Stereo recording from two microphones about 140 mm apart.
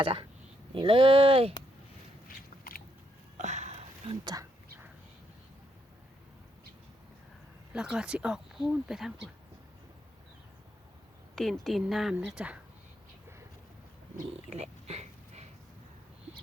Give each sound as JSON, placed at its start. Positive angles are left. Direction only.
{"t": 0.0, "sound": "speech", "side_deg": -40}
{"t": 2.2, "sound": "biting", "side_deg": 90}
{"t": 3.3, "sound": "a sound", "side_deg": -60}
{"t": 7.7, "sound": "speech", "side_deg": -5}
{"t": 11.3, "sound": "speech", "side_deg": 0}
{"t": 14.3, "sound": "a sound", "side_deg": -50}